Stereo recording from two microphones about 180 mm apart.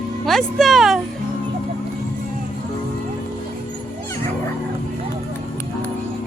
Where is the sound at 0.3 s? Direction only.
Centre (ahead or behind).